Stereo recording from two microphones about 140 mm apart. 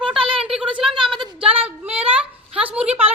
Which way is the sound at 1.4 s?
45° right (ahead or behind).